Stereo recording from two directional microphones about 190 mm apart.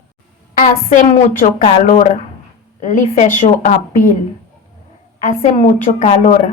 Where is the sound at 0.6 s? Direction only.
45° left (ahead or behind).